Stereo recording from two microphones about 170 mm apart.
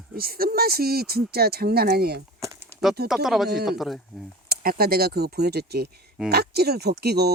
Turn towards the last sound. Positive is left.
turn(degrees=-70)  # may be behind; listen again after turning